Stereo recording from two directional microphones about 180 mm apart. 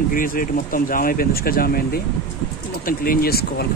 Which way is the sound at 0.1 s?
50° left (ahead or behind).